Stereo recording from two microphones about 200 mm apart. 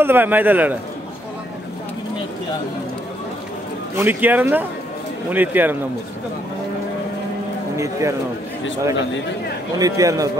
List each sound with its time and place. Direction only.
0.0 s speech: 10° right (ahead or behind)
3.9 s speech: 10° right (ahead or behind)
7.7 s speech: 15° right (ahead or behind)
9.8 s speech: 15° right (ahead or behind)